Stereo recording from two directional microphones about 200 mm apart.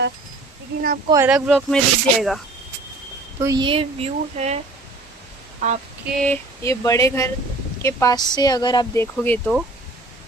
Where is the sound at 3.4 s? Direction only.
20° right (ahead or behind).